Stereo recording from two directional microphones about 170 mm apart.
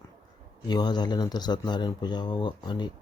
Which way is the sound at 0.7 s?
25° left (ahead or behind).